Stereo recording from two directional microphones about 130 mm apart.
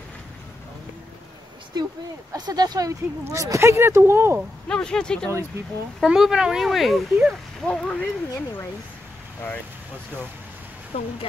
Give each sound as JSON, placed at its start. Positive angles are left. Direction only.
{"t": 2.3, "sound": "speech", "side_deg": -30}
{"t": 4.6, "sound": "speech", "side_deg": 5}
{"t": 7.7, "sound": "speech", "side_deg": 10}